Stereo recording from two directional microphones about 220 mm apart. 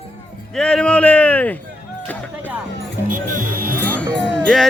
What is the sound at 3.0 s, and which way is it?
Music, 40° right (ahead or behind).